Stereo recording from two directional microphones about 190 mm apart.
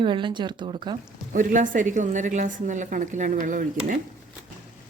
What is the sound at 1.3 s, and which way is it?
A woman's voice, 45° right (ahead or behind).